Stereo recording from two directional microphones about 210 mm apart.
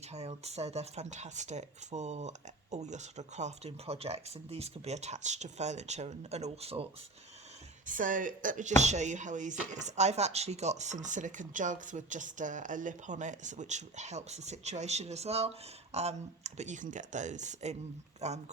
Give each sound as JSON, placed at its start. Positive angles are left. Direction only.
{"t": 0.1, "sound": "speech", "side_deg": -30}
{"t": 7.9, "sound": "speech", "side_deg": -40}